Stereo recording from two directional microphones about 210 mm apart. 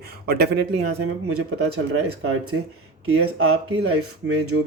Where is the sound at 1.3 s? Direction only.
90° right.